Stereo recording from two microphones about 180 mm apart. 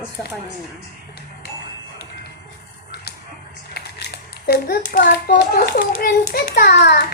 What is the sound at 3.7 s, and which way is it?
A child's voice, 65° left (ahead or behind).